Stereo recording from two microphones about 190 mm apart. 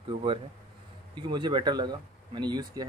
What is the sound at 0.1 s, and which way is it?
Speech, 30° right (ahead or behind).